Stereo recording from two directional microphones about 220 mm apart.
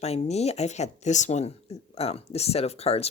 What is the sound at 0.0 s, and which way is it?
Speech, 30° left (ahead or behind).